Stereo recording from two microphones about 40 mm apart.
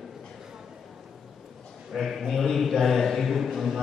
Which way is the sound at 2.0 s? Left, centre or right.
Centre.